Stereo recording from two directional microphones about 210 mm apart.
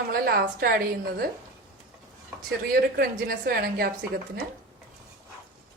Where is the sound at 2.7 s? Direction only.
45° right (ahead or behind).